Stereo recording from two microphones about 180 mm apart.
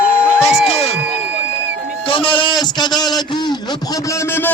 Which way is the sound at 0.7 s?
35° left (ahead or behind).